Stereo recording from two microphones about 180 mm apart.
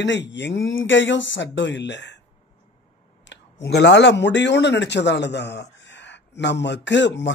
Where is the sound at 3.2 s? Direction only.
80° left.